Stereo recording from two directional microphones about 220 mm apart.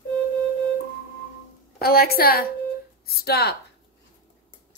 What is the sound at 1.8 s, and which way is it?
A woman's voice, 45° left (ahead or behind).